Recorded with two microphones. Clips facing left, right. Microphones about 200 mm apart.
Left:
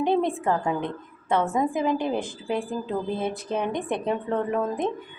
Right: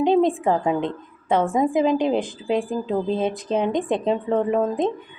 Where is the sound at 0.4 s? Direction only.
20° right (ahead or behind).